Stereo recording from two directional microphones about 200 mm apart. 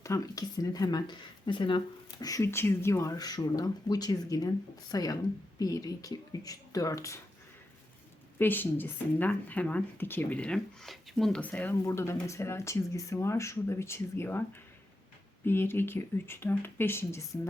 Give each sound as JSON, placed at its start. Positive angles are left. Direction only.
{"t": 0.0, "sound": "speech", "side_deg": 15}
{"t": 8.4, "sound": "speech", "side_deg": 10}
{"t": 15.4, "sound": "speech", "side_deg": 10}